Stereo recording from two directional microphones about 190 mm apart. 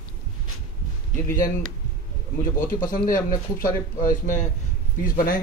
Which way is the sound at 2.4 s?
45° left (ahead or behind).